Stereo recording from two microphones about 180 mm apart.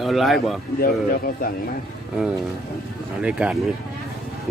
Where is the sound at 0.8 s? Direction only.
55° left (ahead or behind).